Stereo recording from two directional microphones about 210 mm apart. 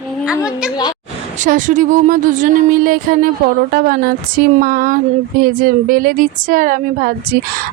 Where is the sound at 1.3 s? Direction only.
40° right (ahead or behind).